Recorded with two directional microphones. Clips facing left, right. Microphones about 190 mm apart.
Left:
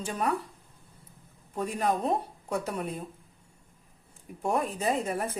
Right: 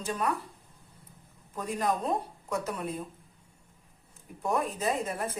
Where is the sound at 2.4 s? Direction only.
30° left (ahead or behind).